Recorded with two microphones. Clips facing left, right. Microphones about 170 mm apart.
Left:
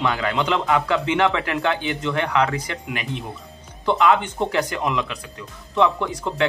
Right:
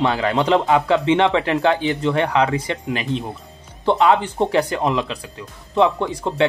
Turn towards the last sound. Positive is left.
turn(degrees=-25)  # may be behind; listen again after turning